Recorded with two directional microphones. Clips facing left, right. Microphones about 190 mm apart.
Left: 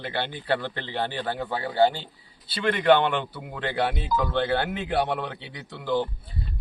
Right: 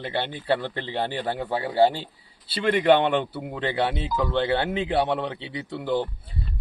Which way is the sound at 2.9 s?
25° right (ahead or behind).